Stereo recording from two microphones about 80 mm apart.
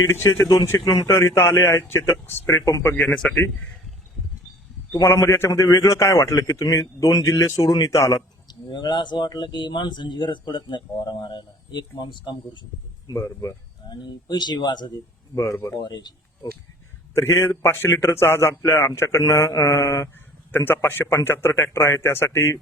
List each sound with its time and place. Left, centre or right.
0.1 s speech: left
3.1 s a man's voice: centre
4.9 s speech: left
5.5 s a man's voice: left
8.4 s speech: left
13.1 s speech: left
13.9 s a man's voice: left
17.2 s speech: left